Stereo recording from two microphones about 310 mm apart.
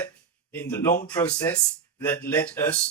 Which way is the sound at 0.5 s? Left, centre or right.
Centre.